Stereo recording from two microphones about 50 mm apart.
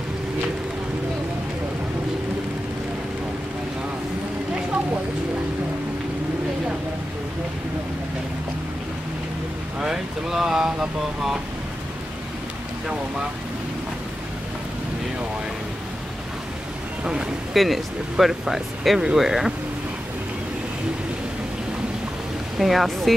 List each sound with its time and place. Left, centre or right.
9.8 s speech: centre
17.0 s speech: centre
17.6 s speech: centre
22.6 s speech: centre